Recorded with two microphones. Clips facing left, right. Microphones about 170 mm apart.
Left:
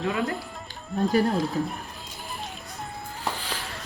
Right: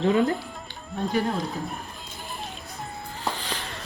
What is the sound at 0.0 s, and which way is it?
Speech, 30° right (ahead or behind).